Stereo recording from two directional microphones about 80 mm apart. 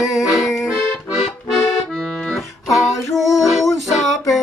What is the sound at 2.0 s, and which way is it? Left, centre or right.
Accordion, centre.